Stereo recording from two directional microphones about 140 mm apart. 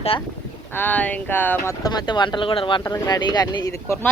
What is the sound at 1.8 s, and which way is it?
Speech, 30° left (ahead or behind).